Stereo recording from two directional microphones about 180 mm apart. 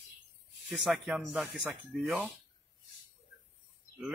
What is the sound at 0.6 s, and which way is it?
Speech, 5° right (ahead or behind).